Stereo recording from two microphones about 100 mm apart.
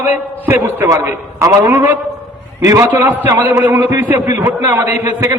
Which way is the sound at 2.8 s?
20° right (ahead or behind).